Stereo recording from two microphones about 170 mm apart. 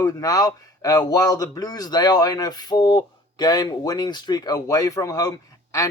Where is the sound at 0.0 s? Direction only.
20° left (ahead or behind).